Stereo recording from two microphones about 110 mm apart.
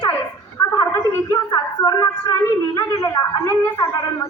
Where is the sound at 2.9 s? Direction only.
35° left (ahead or behind).